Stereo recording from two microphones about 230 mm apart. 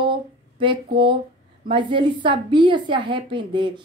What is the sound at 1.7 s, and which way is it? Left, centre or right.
A woman's voice, right.